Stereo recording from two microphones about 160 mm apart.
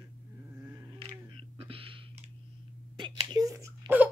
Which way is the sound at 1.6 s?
35° right (ahead or behind).